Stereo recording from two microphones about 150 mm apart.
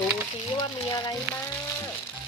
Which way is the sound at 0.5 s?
25° left (ahead or behind).